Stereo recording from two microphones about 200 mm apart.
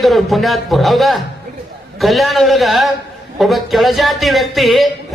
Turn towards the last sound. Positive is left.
turn(degrees=0)  # may be behind; listen again after turning